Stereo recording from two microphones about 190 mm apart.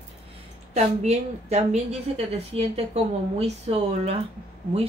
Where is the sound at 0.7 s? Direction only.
35° right (ahead or behind).